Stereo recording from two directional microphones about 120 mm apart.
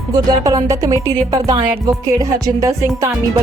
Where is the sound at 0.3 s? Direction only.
30° right (ahead or behind).